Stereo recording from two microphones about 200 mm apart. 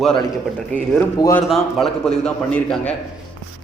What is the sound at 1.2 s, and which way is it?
Speech, 15° left (ahead or behind).